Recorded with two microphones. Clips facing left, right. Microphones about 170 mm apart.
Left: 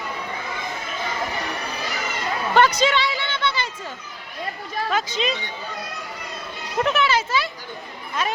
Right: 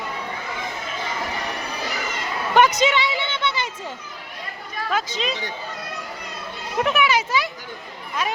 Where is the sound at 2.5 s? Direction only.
20° right (ahead or behind).